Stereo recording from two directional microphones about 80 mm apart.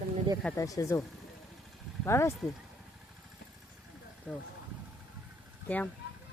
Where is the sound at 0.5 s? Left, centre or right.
Left.